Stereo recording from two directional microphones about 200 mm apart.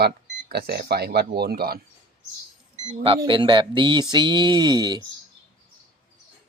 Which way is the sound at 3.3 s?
25° right (ahead or behind).